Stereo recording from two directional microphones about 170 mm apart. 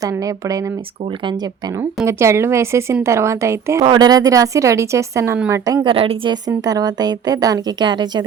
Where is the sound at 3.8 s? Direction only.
25° right (ahead or behind).